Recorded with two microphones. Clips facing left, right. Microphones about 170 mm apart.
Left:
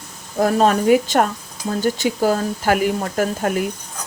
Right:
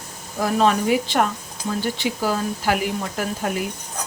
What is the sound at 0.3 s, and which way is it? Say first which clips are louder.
Speech: left 3 dB; 45° left (ahead or behind).